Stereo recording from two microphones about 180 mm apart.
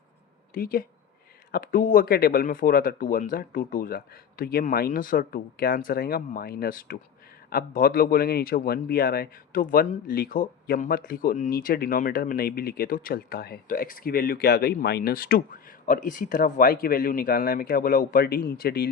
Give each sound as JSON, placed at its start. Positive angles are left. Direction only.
{"t": 0.5, "sound": "speech", "side_deg": 55}